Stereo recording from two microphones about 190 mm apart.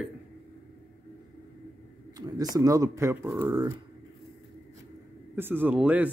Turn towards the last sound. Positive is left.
turn(degrees=-5)  # may be behind; listen again after turning